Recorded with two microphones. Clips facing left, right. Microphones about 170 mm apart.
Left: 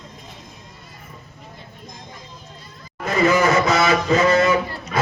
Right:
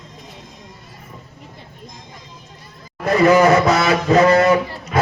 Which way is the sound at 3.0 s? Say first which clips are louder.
Right 5 dB; 60° right (ahead or behind).